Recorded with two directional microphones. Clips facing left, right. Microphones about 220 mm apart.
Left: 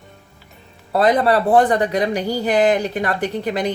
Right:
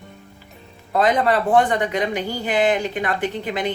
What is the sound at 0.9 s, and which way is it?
Speech, 35° left (ahead or behind).